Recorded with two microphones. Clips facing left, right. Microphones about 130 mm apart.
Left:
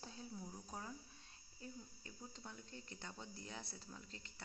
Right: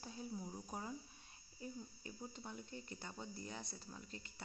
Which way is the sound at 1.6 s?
10° right (ahead or behind).